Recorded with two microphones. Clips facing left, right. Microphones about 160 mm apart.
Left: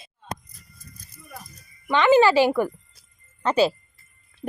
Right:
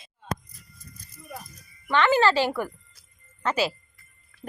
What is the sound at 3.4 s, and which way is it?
Speech, 30° left (ahead or behind).